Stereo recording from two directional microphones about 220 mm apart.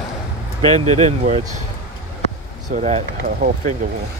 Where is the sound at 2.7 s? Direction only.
30° right (ahead or behind).